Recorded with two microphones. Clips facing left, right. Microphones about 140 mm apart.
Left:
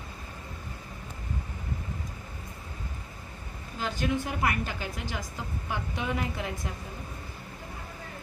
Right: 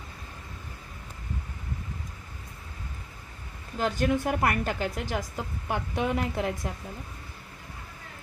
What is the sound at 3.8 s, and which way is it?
A woman's voice, 50° right (ahead or behind).